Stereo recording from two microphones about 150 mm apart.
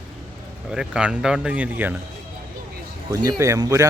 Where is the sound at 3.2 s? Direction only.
25° right (ahead or behind).